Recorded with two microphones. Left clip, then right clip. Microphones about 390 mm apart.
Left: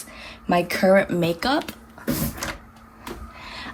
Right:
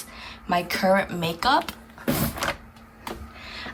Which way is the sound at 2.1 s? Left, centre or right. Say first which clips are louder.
Right 1 dB; centre.